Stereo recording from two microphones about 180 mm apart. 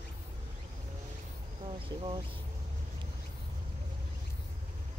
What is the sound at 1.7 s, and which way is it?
Speech, 30° right (ahead or behind).